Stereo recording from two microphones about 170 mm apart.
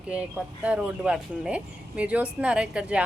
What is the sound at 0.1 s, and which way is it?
Speech, 5° right (ahead or behind).